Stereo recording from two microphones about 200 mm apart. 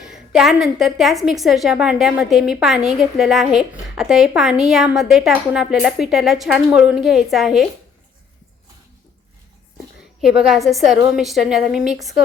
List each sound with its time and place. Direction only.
0.0 s a woman's voice: 5° right (ahead or behind)
10.2 s a woman's voice: centre (ahead or behind)